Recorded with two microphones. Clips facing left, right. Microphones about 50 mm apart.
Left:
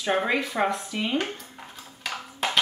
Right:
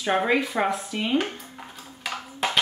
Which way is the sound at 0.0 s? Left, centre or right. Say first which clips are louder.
Right 2 dB; centre.